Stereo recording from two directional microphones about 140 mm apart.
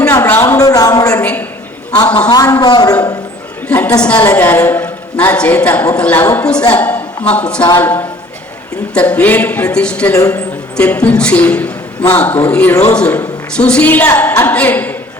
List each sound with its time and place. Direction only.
0.1 s a sound: 20° left (ahead or behind)
1.2 s a woman's voice: 10° left (ahead or behind)
2.3 s a man's voice: 25° left (ahead or behind)
3.7 s a woman's voice: 10° left (ahead or behind)
10.2 s a man's voice: 25° left (ahead or behind)
10.8 s a woman's voice: 10° left (ahead or behind)